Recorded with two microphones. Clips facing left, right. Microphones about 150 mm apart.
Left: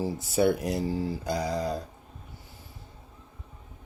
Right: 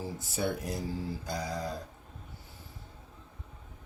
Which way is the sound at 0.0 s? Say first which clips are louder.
Left 9 dB; 75° left (ahead or behind).